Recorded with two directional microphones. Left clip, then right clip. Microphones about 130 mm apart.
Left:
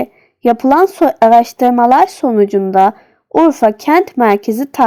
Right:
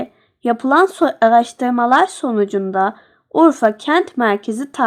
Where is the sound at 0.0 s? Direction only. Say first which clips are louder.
Left 8 dB; 25° left (ahead or behind).